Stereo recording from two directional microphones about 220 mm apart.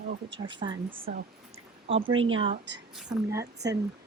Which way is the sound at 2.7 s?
55° right (ahead or behind).